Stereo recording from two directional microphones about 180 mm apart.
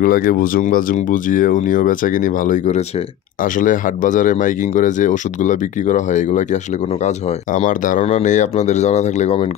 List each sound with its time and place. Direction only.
0.0 s speech: 55° left (ahead or behind); by 9.5 s 35° left (ahead or behind)